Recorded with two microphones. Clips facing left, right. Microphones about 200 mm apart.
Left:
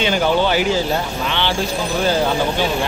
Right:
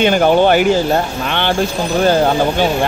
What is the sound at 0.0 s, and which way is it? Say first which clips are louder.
Speech: right 6 dB; 55° right (ahead or behind).